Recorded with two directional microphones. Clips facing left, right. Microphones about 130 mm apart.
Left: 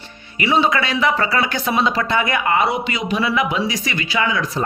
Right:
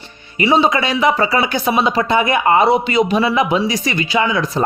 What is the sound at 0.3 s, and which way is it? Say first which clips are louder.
Speech: right 3 dB; 30° right (ahead or behind).